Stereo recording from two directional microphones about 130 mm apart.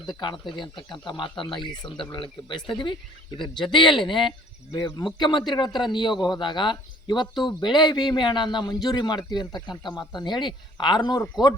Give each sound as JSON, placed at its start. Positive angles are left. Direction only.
{"t": 0.0, "sound": "a man's voice", "side_deg": 35}